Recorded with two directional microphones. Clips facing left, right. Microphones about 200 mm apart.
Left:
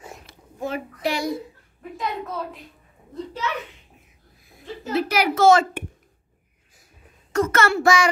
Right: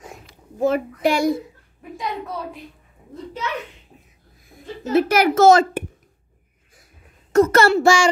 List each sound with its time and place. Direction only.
0.6 s a child's voice: 45° right (ahead or behind)
4.9 s a child's voice: 50° right (ahead or behind)
7.3 s a child's voice: 35° right (ahead or behind)
7.7 s child singing: 30° right (ahead or behind)